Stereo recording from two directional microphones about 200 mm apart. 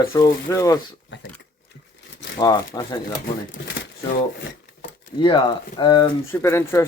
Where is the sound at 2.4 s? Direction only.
20° left (ahead or behind).